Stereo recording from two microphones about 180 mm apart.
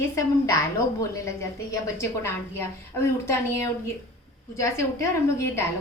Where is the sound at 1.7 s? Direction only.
15° left (ahead or behind).